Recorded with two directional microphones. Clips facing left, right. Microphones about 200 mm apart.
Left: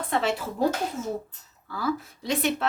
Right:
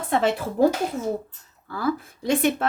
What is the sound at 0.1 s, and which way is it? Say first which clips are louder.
Speech: right 4 dB; 50° right (ahead or behind).